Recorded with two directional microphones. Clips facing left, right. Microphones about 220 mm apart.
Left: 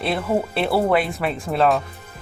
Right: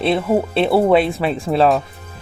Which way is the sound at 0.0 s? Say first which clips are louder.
Right 5 dB; 25° right (ahead or behind).